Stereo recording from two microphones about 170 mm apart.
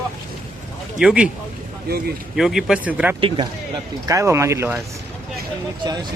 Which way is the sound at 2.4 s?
Centre (ahead or behind).